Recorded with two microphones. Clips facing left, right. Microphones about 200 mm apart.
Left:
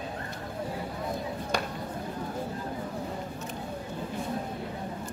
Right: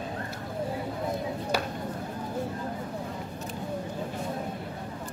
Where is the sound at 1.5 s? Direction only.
5° right (ahead or behind).